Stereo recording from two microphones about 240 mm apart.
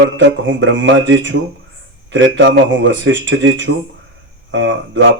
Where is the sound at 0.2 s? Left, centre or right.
Right.